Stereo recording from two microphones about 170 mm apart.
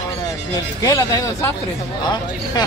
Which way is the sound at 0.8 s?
20° left (ahead or behind).